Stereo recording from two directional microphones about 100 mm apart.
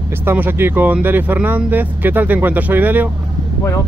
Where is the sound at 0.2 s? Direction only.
20° right (ahead or behind).